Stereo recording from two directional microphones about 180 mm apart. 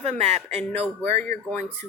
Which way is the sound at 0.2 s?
35° right (ahead or behind).